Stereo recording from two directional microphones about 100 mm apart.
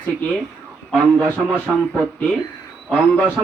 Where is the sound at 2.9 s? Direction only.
15° left (ahead or behind).